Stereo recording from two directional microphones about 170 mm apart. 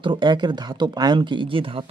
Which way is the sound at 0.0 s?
30° right (ahead or behind).